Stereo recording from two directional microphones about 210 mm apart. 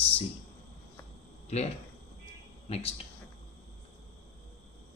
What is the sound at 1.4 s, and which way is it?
Speech, 30° left (ahead or behind).